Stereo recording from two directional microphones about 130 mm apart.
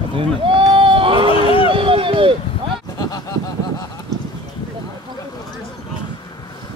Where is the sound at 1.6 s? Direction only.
40° right (ahead or behind).